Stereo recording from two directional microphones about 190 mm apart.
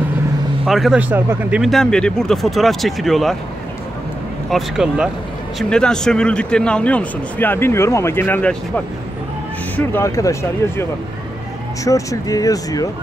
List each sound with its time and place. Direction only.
0.7 s a man's voice: centre (ahead or behind)
4.5 s a man's voice: centre (ahead or behind); by 10.3 s 15° left (ahead or behind)
11.8 s a man's voice: 15° left (ahead or behind)